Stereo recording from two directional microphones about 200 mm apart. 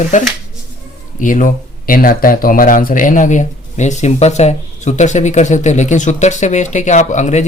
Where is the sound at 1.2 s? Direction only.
40° left (ahead or behind).